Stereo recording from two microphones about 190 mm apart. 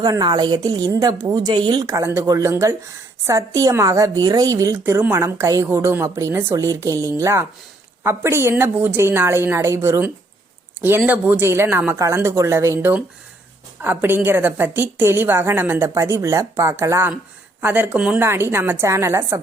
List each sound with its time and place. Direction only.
0.0 s a woman's voice: 20° right (ahead or behind)